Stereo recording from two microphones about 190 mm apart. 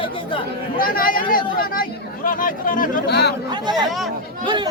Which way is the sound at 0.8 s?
50° left (ahead or behind).